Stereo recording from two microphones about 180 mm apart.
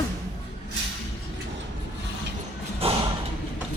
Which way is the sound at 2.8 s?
35° right (ahead or behind).